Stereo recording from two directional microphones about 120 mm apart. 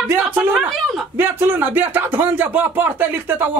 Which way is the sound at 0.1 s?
15° right (ahead or behind).